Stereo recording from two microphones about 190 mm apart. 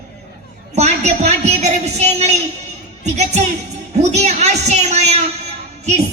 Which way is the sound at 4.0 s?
35° right (ahead or behind).